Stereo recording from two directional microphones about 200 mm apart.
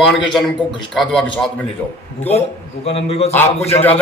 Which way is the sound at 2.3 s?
30° left (ahead or behind).